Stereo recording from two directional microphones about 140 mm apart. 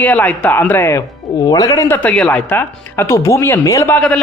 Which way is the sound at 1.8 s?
15° left (ahead or behind).